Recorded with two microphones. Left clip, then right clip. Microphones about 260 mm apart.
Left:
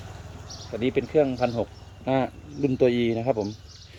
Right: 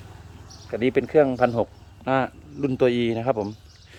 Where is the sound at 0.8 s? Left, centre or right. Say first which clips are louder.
Right 3 dB; centre.